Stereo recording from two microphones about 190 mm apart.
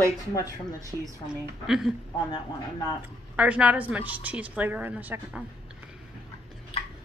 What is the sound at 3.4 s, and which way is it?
A woman's voice, 5° right (ahead or behind).